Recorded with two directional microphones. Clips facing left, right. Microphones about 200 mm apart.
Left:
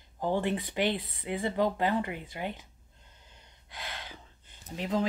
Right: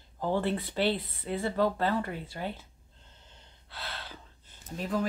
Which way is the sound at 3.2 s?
15° left (ahead or behind).